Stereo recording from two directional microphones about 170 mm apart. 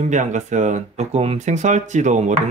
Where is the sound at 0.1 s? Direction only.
45° right (ahead or behind).